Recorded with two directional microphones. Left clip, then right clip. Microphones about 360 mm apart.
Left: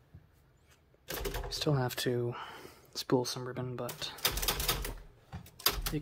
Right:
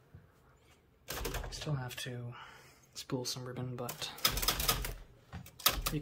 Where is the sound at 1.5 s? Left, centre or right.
Centre.